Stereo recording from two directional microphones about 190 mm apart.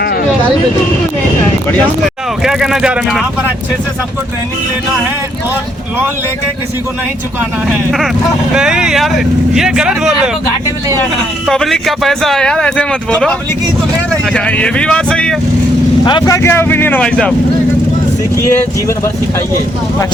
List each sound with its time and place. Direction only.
2.4 s speech: centre (ahead or behind)
8.5 s speech: 5° right (ahead or behind)
11.4 s speech: centre (ahead or behind)
14.3 s speech: 5° left (ahead or behind)
16.0 s speech: 20° left (ahead or behind); by 17.3 s 5° left (ahead or behind)